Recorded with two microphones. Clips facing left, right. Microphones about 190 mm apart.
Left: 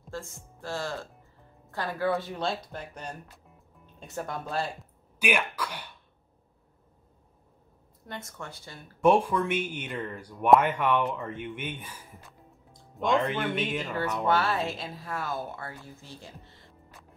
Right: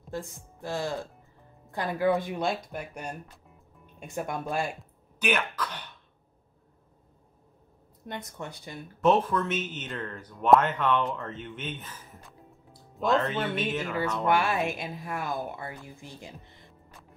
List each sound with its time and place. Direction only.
0.1 s speech: 15° right (ahead or behind)
5.2 s speech: 10° left (ahead or behind)
8.0 s speech: 20° right (ahead or behind)
9.0 s speech: 10° left (ahead or behind)
12.3 s music: centre (ahead or behind)
13.2 s speech: 10° left (ahead or behind)
14.2 s speech: 15° right (ahead or behind)